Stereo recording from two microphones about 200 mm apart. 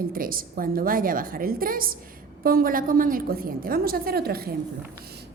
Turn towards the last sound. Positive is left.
turn(degrees=-50)  # may be behind; listen again after turning